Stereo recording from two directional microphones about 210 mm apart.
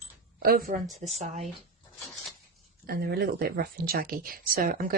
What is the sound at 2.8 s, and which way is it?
A woman's voice, 45° right (ahead or behind).